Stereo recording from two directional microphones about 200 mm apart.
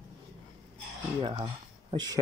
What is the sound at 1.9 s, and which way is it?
Speech, 20° right (ahead or behind).